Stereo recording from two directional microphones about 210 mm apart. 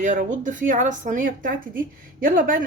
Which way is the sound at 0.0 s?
35° right (ahead or behind).